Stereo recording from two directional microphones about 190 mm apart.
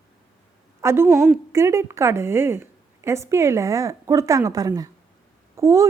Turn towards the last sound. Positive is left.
turn(degrees=-15)  # may be behind; listen again after turning